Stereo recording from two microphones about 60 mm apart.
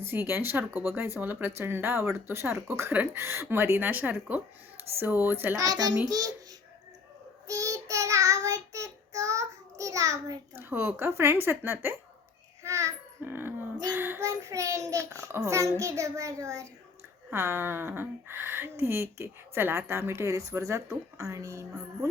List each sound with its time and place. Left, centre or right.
0.0 s speech: right
5.5 s a child's voice: right
7.4 s child singing: right
10.5 s speech: right
12.6 s a sound: right
13.2 s a sound: right
14.2 s a child's voice: right
17.3 s speech: right